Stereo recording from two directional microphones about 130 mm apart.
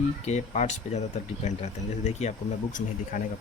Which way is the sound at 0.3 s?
60° left (ahead or behind).